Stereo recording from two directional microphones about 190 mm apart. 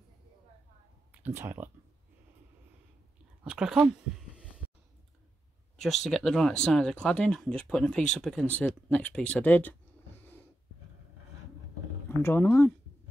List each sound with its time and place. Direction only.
1.2 s speech: 10° right (ahead or behind)
3.4 s speech: 5° right (ahead or behind)
6.0 s speech: 5° left (ahead or behind)
12.2 s speech: 10° left (ahead or behind)